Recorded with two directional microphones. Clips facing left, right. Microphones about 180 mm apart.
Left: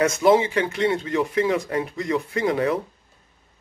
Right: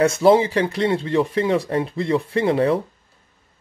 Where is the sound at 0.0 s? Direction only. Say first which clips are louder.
Right 3 dB; 30° right (ahead or behind).